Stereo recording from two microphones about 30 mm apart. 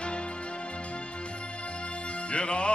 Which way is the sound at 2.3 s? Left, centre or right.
Left.